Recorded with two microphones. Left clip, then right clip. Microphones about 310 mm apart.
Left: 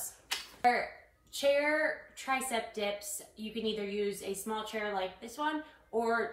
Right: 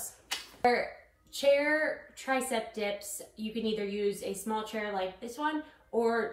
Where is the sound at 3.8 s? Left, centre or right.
Left.